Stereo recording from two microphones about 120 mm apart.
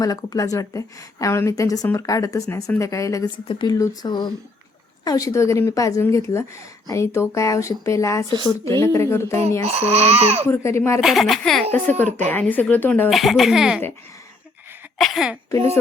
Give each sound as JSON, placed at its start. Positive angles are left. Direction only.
{"t": 0.0, "sound": "a woman's voice", "side_deg": 30}
{"t": 3.3, "sound": "speech", "side_deg": 45}
{"t": 3.8, "sound": "a woman's voice", "side_deg": 30}
{"t": 9.6, "sound": "speech", "side_deg": -60}
{"t": 10.5, "sound": "a woman's voice", "side_deg": 25}
{"t": 11.0, "sound": "speech", "side_deg": 0}
{"t": 11.7, "sound": "speech", "side_deg": 15}
{"t": 13.1, "sound": "speech", "side_deg": 0}
{"t": 14.9, "sound": "speech", "side_deg": 0}